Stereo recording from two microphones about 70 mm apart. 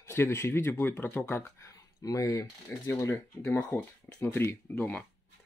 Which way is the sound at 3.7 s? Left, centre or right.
Left.